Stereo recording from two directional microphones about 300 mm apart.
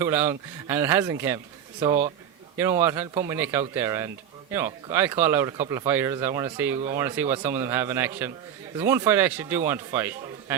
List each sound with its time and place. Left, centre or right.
0.0 s speech: centre